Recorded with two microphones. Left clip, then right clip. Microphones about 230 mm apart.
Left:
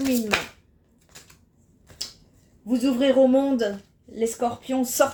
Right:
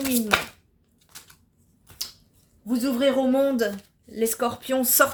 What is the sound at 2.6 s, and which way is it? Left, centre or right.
Speech, right.